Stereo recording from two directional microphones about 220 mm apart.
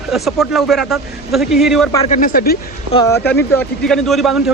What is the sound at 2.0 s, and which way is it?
Speech, 35° left (ahead or behind).